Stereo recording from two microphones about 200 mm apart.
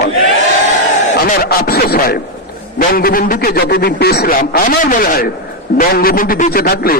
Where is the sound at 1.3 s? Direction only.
50° left (ahead or behind).